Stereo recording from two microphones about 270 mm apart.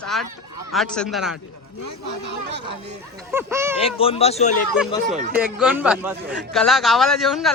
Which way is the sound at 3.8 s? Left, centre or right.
Left.